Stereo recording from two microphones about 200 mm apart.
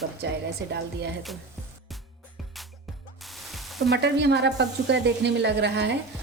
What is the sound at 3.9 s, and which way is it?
A woman's voice, 60° right (ahead or behind).